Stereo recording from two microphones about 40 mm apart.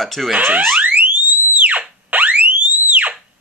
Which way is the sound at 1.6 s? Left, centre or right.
Right.